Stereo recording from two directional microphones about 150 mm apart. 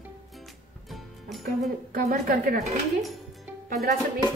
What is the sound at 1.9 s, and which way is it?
Speech, 75° right (ahead or behind).